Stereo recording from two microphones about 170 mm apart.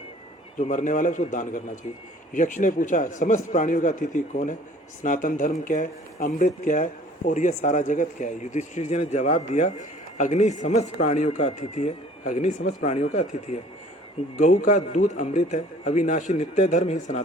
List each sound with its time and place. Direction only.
0.6 s speech: 50° left (ahead or behind)